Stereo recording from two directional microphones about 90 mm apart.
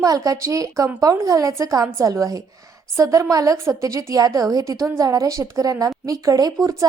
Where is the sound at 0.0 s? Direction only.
40° right (ahead or behind).